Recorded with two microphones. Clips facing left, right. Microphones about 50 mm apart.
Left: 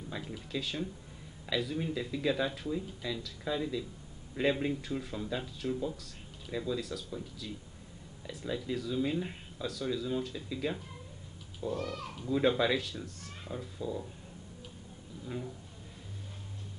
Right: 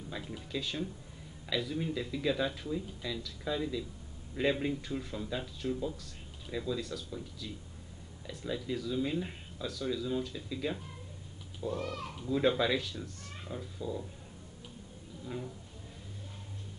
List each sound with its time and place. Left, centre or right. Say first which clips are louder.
0.5 s speech: even; centre
11.7 s a child's voice: left 1 dB; right
12.2 s speech: left 1 dB; centre
15.2 s speech: left 1 dB; centre